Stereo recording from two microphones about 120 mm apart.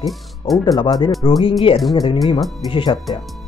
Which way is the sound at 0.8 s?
40° left (ahead or behind).